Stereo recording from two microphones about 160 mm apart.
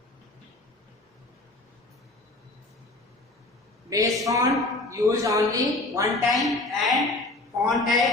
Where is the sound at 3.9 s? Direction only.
20° right (ahead or behind).